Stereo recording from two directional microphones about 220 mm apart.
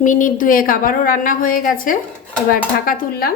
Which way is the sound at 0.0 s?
35° left (ahead or behind).